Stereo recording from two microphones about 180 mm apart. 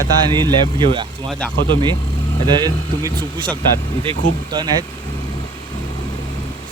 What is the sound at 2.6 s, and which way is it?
Speech, 25° right (ahead or behind).